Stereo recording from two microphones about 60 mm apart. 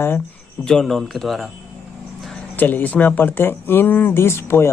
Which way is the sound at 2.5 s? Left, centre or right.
Left.